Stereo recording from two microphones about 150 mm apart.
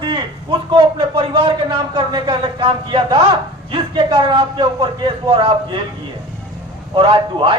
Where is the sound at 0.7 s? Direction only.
35° right (ahead or behind).